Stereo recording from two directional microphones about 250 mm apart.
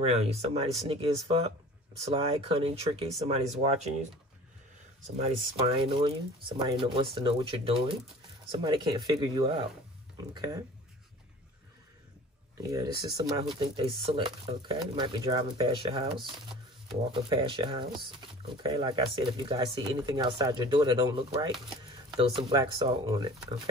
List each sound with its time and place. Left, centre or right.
0.0 s speech: right
5.1 s speech: right
12.6 s speech: centre
17.1 s speech: centre